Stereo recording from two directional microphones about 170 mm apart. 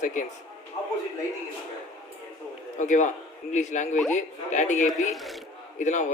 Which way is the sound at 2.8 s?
45° left (ahead or behind).